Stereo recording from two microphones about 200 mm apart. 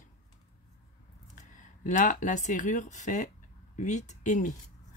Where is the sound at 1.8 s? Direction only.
40° left (ahead or behind).